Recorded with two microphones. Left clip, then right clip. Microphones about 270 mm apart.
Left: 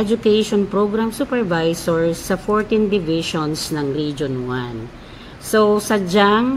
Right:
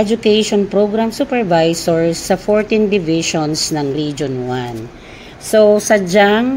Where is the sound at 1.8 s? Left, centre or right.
Centre.